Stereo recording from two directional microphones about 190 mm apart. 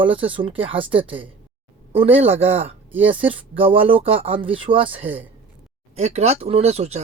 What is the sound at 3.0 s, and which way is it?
Speech, 30° right (ahead or behind).